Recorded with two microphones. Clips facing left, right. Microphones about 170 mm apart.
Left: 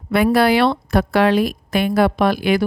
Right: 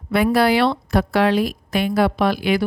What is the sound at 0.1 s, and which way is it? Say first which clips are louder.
A woman's voice: left 2 dB; 60° left (ahead or behind).